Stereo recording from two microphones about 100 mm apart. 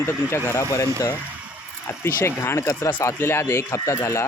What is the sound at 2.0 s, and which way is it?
Speech, 25° left (ahead or behind).